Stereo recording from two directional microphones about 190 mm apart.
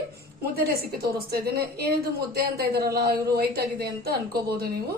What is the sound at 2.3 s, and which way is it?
Speech, 55° right (ahead or behind).